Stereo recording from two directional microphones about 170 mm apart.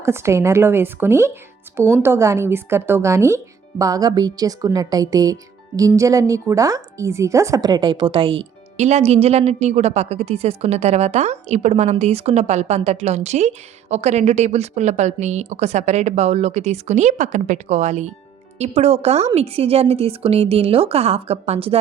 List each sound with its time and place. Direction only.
0.0 s a woman's voice: 15° right (ahead or behind); by 21.8 s 35° right (ahead or behind)